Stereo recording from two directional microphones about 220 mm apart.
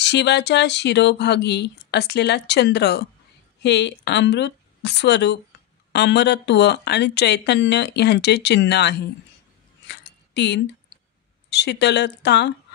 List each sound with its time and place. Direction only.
0.0 s speech: 50° left (ahead or behind)
9.8 s a sound: 50° left (ahead or behind)
11.5 s speech: 50° left (ahead or behind)